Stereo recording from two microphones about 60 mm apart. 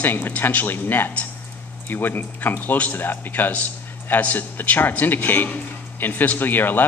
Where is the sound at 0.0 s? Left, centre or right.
Left.